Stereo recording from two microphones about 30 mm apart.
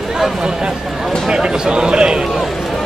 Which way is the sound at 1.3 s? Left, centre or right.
Right.